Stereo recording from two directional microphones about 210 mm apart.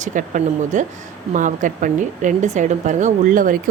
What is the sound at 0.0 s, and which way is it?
A woman's voice, 35° right (ahead or behind).